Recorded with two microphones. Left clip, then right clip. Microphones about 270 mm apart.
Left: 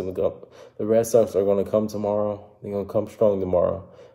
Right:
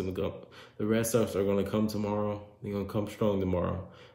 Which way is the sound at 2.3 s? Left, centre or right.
Right.